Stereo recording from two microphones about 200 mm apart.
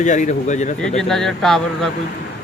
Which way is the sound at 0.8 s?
5° left (ahead or behind).